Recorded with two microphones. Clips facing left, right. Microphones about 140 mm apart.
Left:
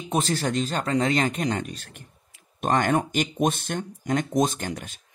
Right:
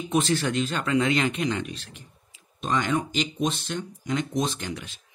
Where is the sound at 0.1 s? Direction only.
40° left (ahead or behind).